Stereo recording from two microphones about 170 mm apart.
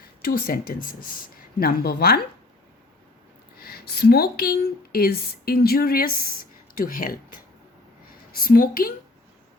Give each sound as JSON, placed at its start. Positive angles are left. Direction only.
{"t": 0.2, "sound": "speech", "side_deg": 60}
{"t": 3.6, "sound": "speech", "side_deg": 65}
{"t": 8.4, "sound": "speech", "side_deg": 55}